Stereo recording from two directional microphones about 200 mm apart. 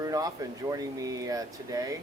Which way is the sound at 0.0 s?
15° right (ahead or behind).